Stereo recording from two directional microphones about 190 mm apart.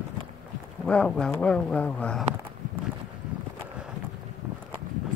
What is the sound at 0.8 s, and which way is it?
Speech, 5° left (ahead or behind).